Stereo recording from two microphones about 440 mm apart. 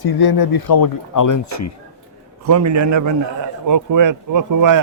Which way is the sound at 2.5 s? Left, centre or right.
Right.